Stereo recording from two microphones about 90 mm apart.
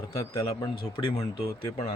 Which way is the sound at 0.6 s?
75° left (ahead or behind).